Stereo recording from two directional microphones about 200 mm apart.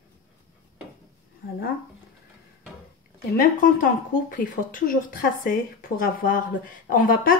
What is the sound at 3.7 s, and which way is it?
A woman's voice, 40° left (ahead or behind).